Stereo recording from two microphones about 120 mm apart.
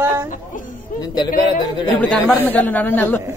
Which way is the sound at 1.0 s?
35° left (ahead or behind).